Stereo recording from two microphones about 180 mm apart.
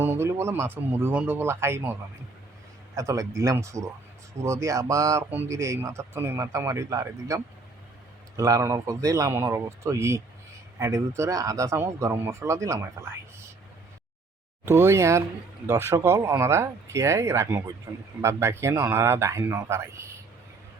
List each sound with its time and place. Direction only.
0.0 s speech: 15° right (ahead or behind)
14.6 s speech: 15° right (ahead or behind)